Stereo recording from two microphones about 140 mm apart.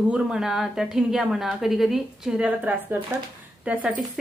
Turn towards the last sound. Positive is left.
turn(degrees=-5)  # may be behind; listen again after turning